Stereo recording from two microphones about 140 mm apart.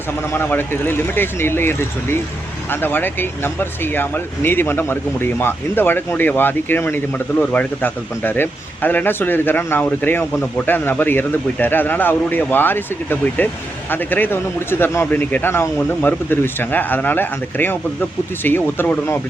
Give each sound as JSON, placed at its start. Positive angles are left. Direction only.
{"t": 0.3, "sound": "speech", "side_deg": 15}